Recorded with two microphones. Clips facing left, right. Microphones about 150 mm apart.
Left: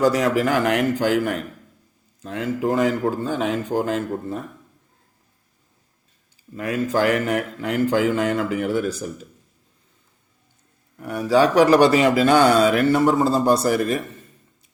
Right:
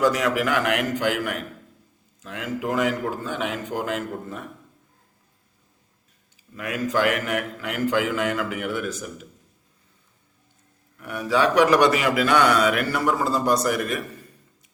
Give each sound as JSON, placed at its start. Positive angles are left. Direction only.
{"t": 0.0, "sound": "speech", "side_deg": 35}
{"t": 6.5, "sound": "speech", "side_deg": 35}
{"t": 10.9, "sound": "speech", "side_deg": 35}